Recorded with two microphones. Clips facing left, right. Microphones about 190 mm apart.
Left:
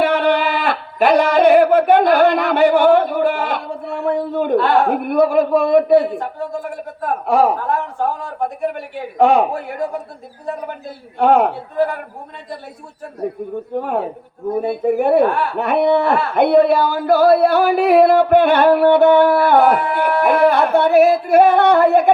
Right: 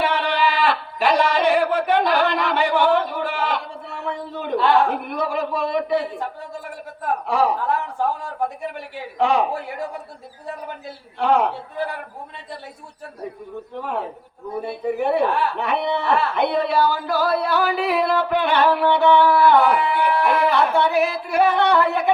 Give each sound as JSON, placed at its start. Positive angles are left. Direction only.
{"t": 0.0, "sound": "speech", "side_deg": 50}
{"t": 7.3, "sound": "speech", "side_deg": 50}
{"t": 8.6, "sound": "speech", "side_deg": 50}
{"t": 10.8, "sound": "speech", "side_deg": 55}
{"t": 13.7, "sound": "speech", "side_deg": 50}